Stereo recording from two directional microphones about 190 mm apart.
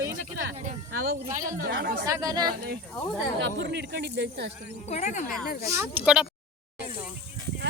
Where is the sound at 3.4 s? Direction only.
65° right (ahead or behind).